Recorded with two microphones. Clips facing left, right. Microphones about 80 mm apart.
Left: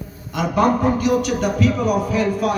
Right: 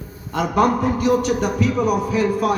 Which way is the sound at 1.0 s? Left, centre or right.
Right.